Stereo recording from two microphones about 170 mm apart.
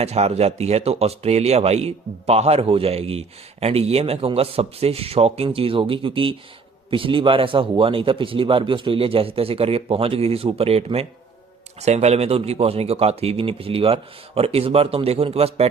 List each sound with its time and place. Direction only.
0.0 s a man's voice: 40° right (ahead or behind)